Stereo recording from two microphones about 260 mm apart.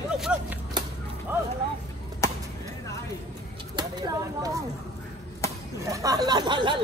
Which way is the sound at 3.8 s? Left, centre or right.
Centre.